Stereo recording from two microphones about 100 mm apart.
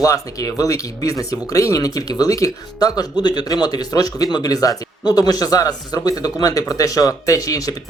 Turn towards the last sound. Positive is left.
turn(degrees=35)  # may be behind; listen again after turning